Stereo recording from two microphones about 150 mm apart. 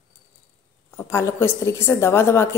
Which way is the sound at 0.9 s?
15° left (ahead or behind).